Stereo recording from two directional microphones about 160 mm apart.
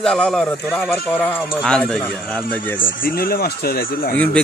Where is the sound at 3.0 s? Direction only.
65° left (ahead or behind).